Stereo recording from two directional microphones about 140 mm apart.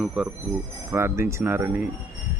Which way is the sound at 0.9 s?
20° right (ahead or behind).